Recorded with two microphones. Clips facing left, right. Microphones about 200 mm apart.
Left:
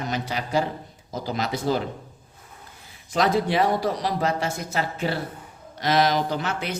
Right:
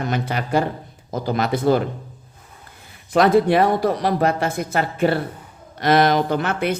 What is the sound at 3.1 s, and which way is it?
A woman's voice, 55° right (ahead or behind).